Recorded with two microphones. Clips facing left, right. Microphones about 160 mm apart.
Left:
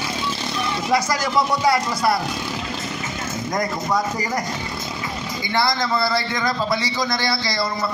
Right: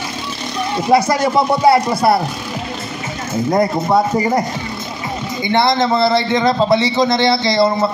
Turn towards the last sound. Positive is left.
turn(degrees=-25)  # may be behind; listen again after turning